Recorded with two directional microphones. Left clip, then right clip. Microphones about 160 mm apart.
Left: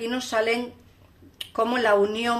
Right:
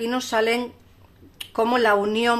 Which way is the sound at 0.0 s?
30° right (ahead or behind).